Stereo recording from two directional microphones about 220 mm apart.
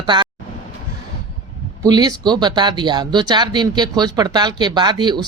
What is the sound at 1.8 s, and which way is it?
Speech, 15° right (ahead or behind).